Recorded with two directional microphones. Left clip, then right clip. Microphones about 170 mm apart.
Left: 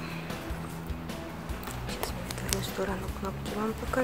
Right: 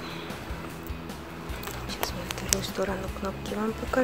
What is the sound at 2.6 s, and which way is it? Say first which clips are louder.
Speech: right 3 dB; 15° right (ahead or behind).